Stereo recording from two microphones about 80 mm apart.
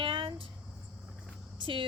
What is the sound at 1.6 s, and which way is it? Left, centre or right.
Speech, right.